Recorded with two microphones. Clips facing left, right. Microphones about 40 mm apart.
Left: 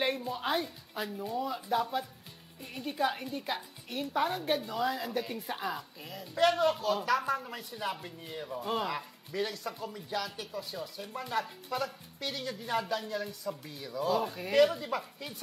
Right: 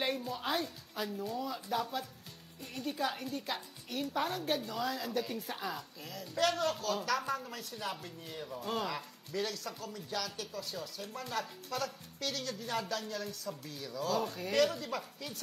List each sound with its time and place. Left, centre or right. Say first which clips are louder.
0.0 s a woman's voice: left 3 dB; centre